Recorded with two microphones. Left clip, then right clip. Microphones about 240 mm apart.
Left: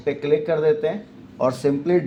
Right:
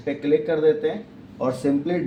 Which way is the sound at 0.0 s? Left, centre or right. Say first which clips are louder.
Left 1 dB; left.